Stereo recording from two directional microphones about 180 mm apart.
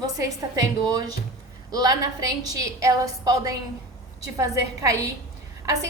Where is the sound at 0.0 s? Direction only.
20° right (ahead or behind).